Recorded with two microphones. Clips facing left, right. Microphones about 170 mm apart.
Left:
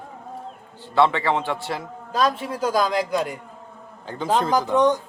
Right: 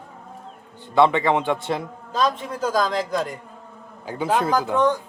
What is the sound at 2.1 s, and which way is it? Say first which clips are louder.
A man's voice: left 1 dB; 5° left (ahead or behind).